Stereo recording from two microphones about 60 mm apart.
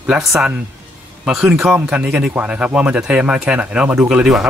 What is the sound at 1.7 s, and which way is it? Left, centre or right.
Speech, right.